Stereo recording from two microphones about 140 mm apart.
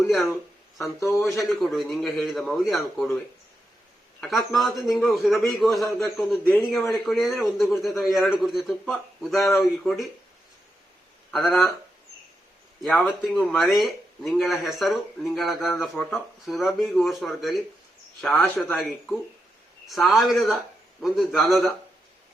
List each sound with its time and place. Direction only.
0.9 s a man's voice: 20° left (ahead or behind)
1.3 s speech: centre (ahead or behind)
4.2 s speech: centre (ahead or behind)
11.3 s speech: centre (ahead or behind)
12.8 s speech: centre (ahead or behind)